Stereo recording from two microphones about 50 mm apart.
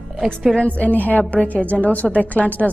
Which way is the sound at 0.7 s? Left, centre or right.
Left.